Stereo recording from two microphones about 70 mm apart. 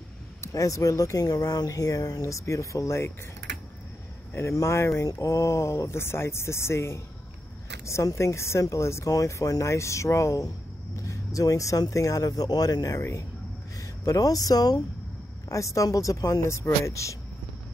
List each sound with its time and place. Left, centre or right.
0.4 s speech: left
4.3 s speech: left
9.1 s speech: left
15.4 s speech: left